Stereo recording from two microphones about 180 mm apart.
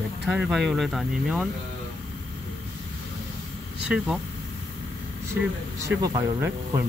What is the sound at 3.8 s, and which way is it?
Speech, 5° right (ahead or behind).